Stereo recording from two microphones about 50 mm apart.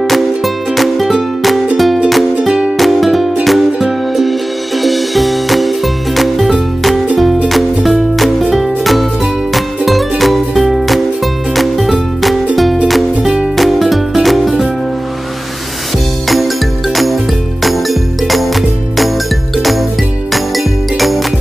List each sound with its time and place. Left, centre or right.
0.0 s music: centre
2.4 s music: centre
2.8 s music: centre
16.9 s music: centre